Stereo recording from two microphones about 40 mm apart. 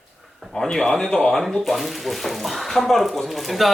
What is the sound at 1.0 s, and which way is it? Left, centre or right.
Speech, left.